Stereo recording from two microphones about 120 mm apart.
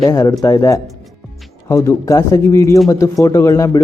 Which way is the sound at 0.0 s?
30° left (ahead or behind).